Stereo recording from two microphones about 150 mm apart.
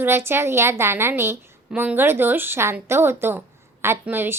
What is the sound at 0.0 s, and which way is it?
A woman's voice, 15° right (ahead or behind).